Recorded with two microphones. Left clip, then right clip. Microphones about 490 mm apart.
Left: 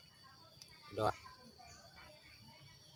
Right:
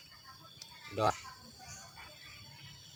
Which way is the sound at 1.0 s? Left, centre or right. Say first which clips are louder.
Right 5 dB; left.